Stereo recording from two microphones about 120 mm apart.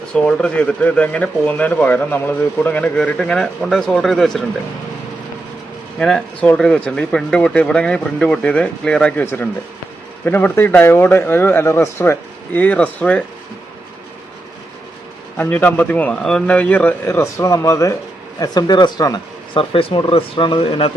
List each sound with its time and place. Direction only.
0.1 s speech: 5° left (ahead or behind)
6.0 s speech: 5° left (ahead or behind)
9.2 s speech: 20° left (ahead or behind)
15.4 s speech: 15° left (ahead or behind); by 19.2 s 35° left (ahead or behind)
19.5 s speech: 50° left (ahead or behind)